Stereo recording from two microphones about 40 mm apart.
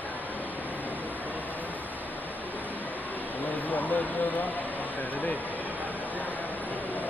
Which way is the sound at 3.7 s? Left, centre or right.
Left.